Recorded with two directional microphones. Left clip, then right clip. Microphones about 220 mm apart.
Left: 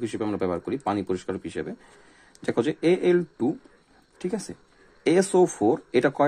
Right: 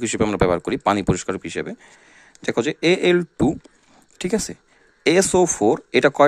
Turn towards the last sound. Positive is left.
turn(degrees=-25)  # may be behind; listen again after turning